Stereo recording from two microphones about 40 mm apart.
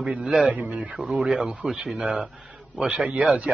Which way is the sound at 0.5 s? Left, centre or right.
Right.